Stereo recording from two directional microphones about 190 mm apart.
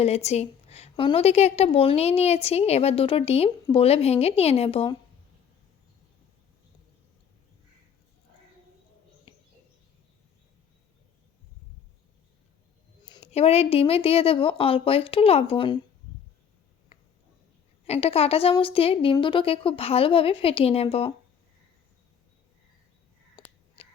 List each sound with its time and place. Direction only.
0.0 s a woman's voice: 35° left (ahead or behind)
9.3 s bird: 25° left (ahead or behind)
13.1 s a woman's voice: 30° left (ahead or behind)
17.8 s a woman's voice: 30° left (ahead or behind)
23.3 s crow: 30° left (ahead or behind)